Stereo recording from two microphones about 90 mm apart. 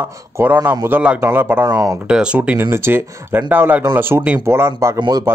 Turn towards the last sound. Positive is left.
turn(degrees=-45)  # may be behind; listen again after turning